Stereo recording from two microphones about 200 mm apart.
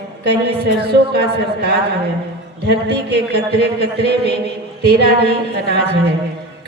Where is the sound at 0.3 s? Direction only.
55° right (ahead or behind).